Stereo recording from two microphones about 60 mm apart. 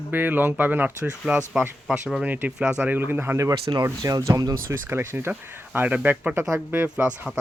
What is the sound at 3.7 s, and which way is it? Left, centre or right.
Speech, right.